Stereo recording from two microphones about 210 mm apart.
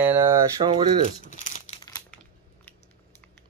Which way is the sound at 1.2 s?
35° left (ahead or behind).